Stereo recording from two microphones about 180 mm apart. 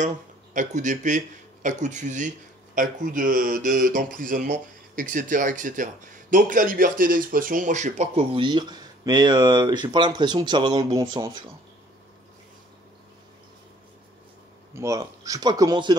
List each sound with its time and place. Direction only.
0.0 s speech: 45° right (ahead or behind); by 11.3 s 20° right (ahead or behind)
14.8 s speech: 20° right (ahead or behind)